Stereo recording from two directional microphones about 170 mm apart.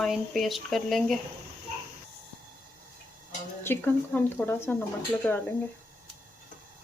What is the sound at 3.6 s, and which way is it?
Speech, 10° left (ahead or behind).